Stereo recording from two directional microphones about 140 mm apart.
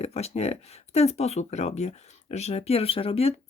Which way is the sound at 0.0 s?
50° left (ahead or behind).